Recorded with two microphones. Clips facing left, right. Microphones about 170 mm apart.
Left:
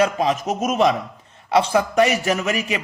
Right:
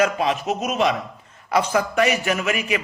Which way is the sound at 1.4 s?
30° left (ahead or behind).